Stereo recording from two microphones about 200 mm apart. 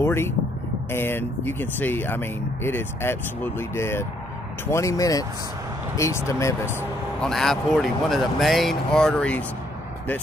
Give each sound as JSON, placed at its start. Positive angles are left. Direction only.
{"t": 0.0, "sound": "vehicle", "side_deg": 10}
{"t": 0.9, "sound": "speech", "side_deg": 10}
{"t": 7.2, "sound": "speech", "side_deg": 0}